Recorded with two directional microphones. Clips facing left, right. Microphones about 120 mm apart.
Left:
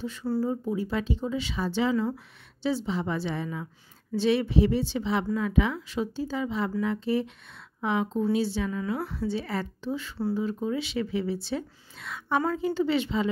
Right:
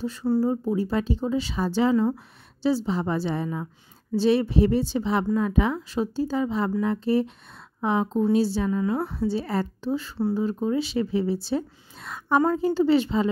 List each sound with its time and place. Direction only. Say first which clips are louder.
0.0 s speech: right 5 dB; 40° right (ahead or behind)